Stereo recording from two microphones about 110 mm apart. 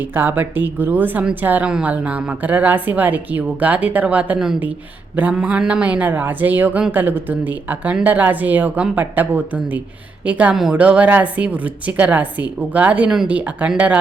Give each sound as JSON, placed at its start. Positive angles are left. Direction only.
{"t": 0.0, "sound": "speech", "side_deg": -20}